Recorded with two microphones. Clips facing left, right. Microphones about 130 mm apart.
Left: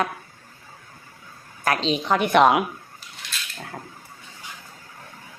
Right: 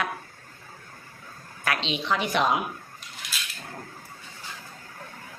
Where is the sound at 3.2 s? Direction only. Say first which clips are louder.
Left 1 dB; centre (ahead or behind).